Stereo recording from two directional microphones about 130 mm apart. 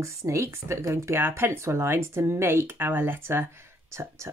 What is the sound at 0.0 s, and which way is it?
Speech, 20° right (ahead or behind).